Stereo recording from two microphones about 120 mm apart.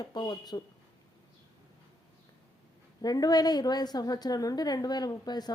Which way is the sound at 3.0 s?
35° left (ahead or behind).